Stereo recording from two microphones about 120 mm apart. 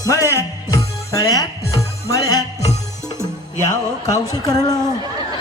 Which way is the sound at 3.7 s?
30° left (ahead or behind).